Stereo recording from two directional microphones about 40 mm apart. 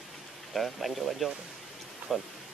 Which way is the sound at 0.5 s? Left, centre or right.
Centre.